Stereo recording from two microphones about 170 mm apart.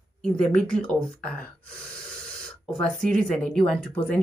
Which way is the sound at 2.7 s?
5° left (ahead or behind).